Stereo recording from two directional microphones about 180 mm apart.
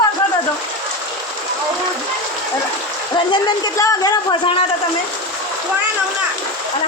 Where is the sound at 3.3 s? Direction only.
25° left (ahead or behind).